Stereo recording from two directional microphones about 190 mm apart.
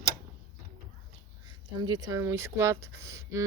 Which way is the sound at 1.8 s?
20° right (ahead or behind).